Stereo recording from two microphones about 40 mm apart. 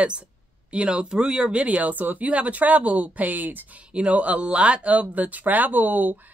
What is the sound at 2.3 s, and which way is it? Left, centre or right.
Speech, right.